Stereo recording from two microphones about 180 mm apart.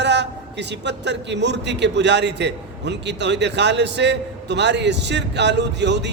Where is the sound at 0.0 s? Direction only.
75° right (ahead or behind).